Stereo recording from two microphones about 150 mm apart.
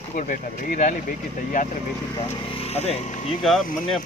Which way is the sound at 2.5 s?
45° left (ahead or behind).